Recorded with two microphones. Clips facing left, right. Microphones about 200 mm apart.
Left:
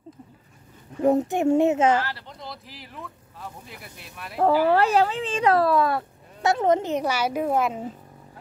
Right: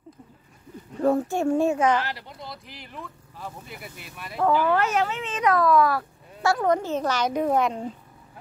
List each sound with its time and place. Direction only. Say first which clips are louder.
1.0 s speech: left 2 dB; 15° left (ahead or behind)
2.0 s speech: left 1 dB; 15° right (ahead or behind)
2.4 s speech: left 2 dB; centre (ahead or behind)
4.6 s speech: left 4 dB; 35° left (ahead or behind); by 7.9 s 5° left (ahead or behind)